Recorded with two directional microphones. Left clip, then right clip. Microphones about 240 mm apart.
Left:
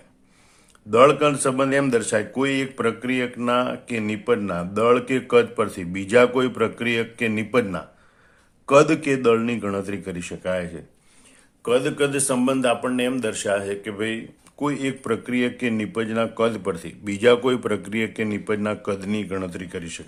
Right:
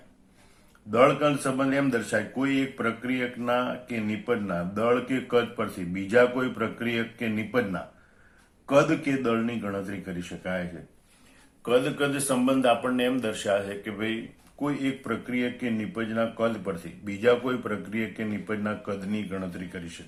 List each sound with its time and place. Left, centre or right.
0.9 s speech: left
11.6 s speech: left